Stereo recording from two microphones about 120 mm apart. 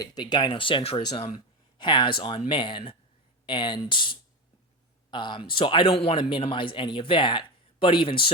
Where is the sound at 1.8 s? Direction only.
40° left (ahead or behind).